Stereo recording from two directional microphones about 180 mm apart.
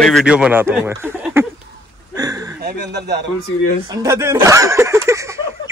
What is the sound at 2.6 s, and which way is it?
Speech, 70° right (ahead or behind).